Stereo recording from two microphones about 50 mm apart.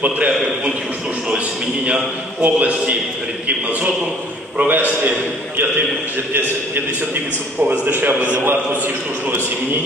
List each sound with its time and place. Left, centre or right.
1.9 s a man's voice: right
4.6 s a man's voice: right
7.6 s a man's voice: right